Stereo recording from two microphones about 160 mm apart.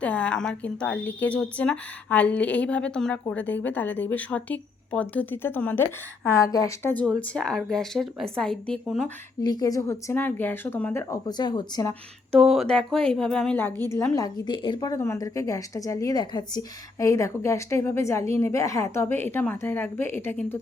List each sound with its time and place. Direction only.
0.0 s a woman's voice: 5° left (ahead or behind)
7.0 s a woman's voice: 5° left (ahead or behind)
9.4 s a woman's voice: 25° left (ahead or behind)
12.3 s a woman's voice: centre (ahead or behind)